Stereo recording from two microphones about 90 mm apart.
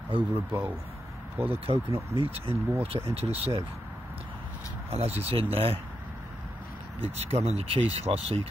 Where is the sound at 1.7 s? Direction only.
90° right.